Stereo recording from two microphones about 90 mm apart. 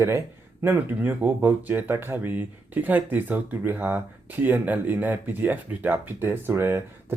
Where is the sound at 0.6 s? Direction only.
25° right (ahead or behind).